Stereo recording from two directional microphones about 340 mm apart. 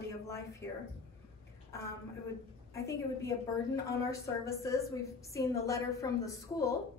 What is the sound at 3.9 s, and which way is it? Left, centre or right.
A woman's voice, centre.